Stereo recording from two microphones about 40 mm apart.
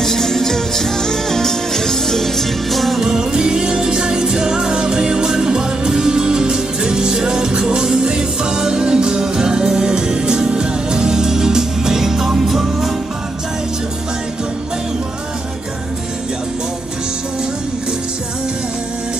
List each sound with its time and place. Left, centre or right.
0.0 s music: centre
3.0 s music: centre